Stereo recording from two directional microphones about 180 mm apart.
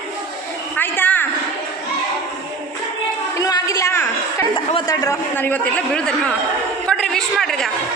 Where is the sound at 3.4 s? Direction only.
20° left (ahead or behind).